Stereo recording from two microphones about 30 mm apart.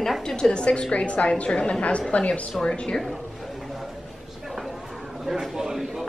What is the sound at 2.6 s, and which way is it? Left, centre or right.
Speech, left.